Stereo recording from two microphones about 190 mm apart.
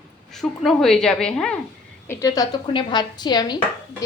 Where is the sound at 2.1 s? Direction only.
15° left (ahead or behind).